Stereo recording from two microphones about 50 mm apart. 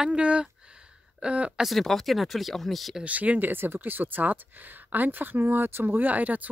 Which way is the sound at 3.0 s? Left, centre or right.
Right.